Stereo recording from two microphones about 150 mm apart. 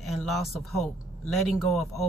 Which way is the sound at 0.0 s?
Centre (ahead or behind).